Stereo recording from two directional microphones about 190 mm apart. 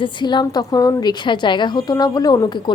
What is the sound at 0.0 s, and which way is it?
A woman's voice, 25° left (ahead or behind).